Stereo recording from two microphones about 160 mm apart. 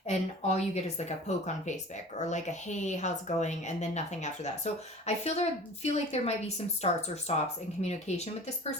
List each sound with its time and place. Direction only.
0.1 s speech: 45° left (ahead or behind)